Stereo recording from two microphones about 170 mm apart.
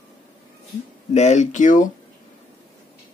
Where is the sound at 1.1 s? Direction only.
40° left (ahead or behind).